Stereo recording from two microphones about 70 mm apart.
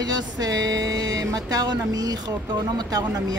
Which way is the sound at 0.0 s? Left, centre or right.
Right.